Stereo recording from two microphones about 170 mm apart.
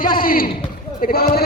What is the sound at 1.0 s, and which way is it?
Sheep, 60° left (ahead or behind).